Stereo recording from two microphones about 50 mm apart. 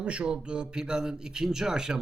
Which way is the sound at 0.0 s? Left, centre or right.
Right.